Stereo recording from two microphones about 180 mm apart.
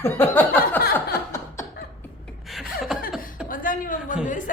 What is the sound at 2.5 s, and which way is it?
Chuckle, centre (ahead or behind).